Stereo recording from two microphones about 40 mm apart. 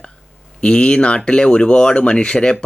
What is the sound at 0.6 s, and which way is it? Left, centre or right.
Speech, left.